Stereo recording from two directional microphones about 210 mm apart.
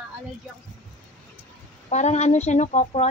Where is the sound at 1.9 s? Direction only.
35° left (ahead or behind).